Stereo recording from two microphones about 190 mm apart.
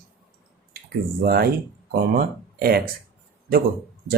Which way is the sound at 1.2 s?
55° right (ahead or behind).